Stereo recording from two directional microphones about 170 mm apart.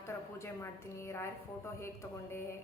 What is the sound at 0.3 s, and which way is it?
A woman's voice, 15° left (ahead or behind).